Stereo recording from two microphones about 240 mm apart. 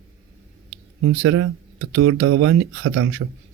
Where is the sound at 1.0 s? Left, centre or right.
Right.